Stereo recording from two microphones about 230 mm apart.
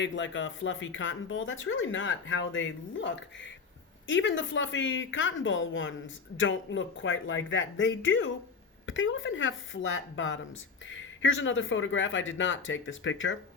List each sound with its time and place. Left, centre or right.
0.0 s speech: left